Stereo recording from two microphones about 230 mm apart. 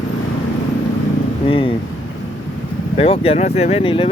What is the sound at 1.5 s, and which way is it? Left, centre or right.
Speech, left.